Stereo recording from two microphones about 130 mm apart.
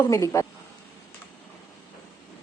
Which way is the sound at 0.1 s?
25° left (ahead or behind).